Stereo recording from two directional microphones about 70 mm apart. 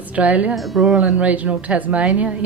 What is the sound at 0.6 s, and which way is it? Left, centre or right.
Speech, centre.